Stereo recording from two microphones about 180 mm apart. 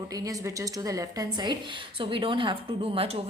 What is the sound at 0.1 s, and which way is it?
A woman's voice, 20° right (ahead or behind).